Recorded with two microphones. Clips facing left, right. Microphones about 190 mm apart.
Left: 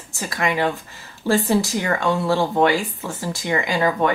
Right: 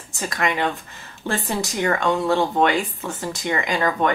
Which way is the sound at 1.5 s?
20° right (ahead or behind).